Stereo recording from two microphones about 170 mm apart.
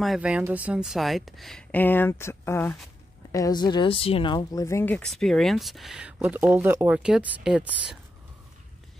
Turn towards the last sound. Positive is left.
turn(degrees=-5)  # may be behind; listen again after turning